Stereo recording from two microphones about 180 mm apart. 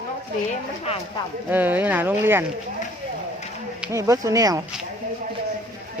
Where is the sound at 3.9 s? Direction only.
15° right (ahead or behind).